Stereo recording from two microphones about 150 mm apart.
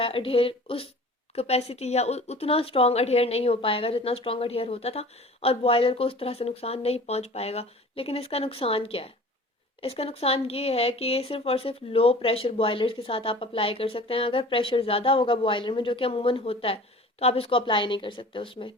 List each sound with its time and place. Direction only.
0.0 s speech: 35° left (ahead or behind)